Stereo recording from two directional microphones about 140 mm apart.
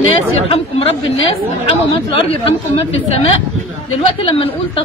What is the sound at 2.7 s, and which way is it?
A woman's voice, 45° left (ahead or behind).